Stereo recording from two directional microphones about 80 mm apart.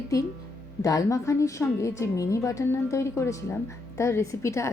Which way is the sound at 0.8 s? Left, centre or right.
Left.